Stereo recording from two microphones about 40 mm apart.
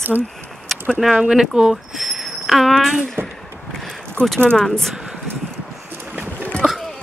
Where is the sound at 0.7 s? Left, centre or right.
Centre.